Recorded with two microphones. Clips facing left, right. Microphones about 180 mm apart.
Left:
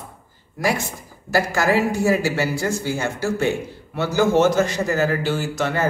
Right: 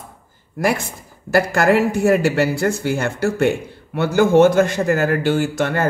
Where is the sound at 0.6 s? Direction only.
55° right (ahead or behind).